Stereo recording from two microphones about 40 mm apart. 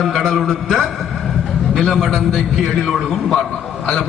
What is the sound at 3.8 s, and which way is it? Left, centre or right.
Speech, centre.